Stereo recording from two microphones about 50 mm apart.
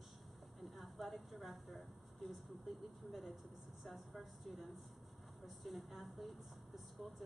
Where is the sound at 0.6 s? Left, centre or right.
Centre.